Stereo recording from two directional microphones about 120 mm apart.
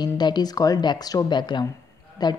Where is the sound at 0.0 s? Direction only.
35° left (ahead or behind).